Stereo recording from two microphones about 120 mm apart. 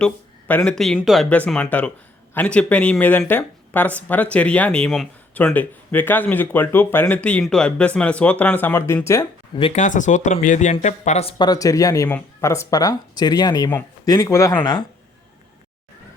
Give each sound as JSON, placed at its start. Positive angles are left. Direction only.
{"t": 0.0, "sound": "speech", "side_deg": 10}
{"t": 1.5, "sound": "speech", "side_deg": 10}
{"t": 9.7, "sound": "speech", "side_deg": 90}
{"t": 11.3, "sound": "speech", "side_deg": 35}
{"t": 14.6, "sound": "speech", "side_deg": 40}